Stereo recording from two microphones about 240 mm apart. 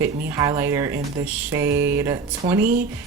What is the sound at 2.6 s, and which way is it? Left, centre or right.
Speech, right.